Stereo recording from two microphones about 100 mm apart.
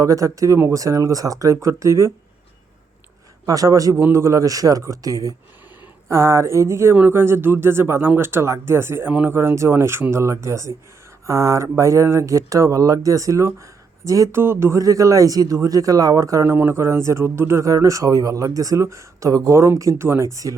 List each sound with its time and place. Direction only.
0.0 s speech: 35° right (ahead or behind)
3.4 s speech: 35° right (ahead or behind)